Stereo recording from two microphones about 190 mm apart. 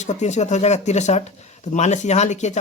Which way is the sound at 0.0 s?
35° left (ahead or behind).